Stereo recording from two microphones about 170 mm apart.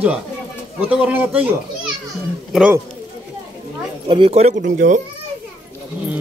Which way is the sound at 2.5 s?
5° right (ahead or behind).